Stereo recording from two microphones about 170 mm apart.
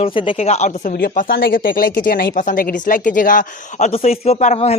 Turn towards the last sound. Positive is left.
turn(degrees=40)  # may be behind; listen again after turning